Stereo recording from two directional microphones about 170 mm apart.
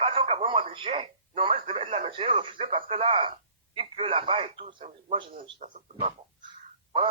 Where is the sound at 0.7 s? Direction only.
30° right (ahead or behind).